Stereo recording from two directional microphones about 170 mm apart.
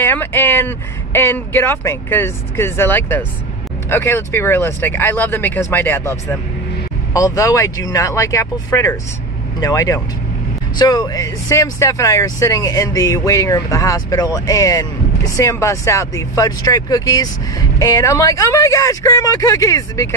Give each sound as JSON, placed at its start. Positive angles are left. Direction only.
{"t": 0.0, "sound": "speech", "side_deg": 10}
{"t": 7.2, "sound": "speech", "side_deg": 20}